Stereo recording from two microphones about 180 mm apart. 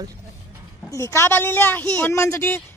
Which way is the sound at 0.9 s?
15° left (ahead or behind).